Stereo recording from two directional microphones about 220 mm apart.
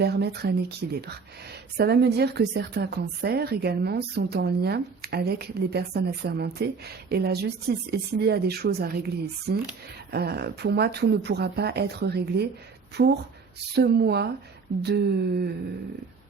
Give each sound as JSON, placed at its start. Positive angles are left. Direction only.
{"t": 0.0, "sound": "a woman's voice", "side_deg": -45}